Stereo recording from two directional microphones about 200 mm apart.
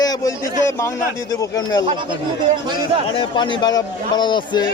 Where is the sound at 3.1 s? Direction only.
25° left (ahead or behind).